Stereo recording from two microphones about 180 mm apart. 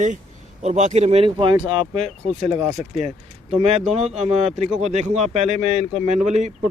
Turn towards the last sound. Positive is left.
turn(degrees=-40)  # may be behind; listen again after turning